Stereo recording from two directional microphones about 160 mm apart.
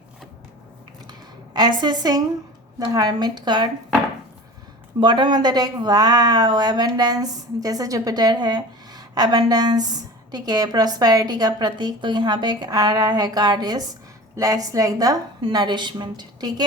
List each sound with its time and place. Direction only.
1.5 s a woman's voice: 25° right (ahead or behind)
4.9 s a woman's voice: 30° right (ahead or behind)